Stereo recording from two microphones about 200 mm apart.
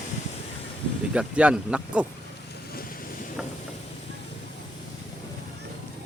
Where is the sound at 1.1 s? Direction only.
5° right (ahead or behind).